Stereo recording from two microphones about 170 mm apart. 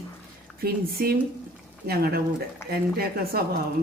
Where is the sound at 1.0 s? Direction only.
65° right (ahead or behind).